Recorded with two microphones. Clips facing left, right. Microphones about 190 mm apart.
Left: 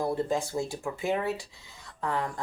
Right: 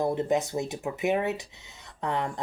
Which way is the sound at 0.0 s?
20° right (ahead or behind).